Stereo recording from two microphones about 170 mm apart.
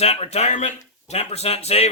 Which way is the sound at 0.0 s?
40° left (ahead or behind).